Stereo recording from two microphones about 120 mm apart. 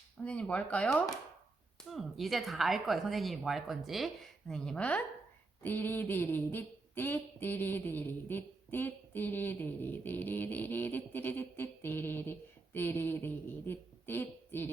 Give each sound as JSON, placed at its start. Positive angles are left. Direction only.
{"t": 0.3, "sound": "speech", "side_deg": 10}
{"t": 1.8, "sound": "speech", "side_deg": 0}